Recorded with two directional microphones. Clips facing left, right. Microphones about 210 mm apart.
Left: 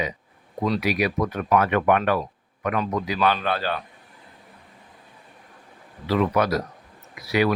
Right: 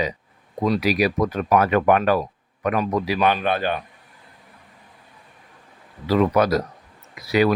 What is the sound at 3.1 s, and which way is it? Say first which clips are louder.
Speech: right 1 dB; 15° right (ahead or behind).